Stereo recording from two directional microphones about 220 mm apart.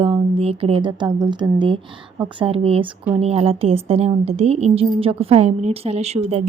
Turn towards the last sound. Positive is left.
turn(degrees=-30)  # may be behind; listen again after turning